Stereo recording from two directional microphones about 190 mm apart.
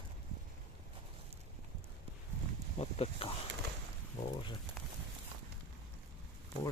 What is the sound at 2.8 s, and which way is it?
Speech, 30° left (ahead or behind).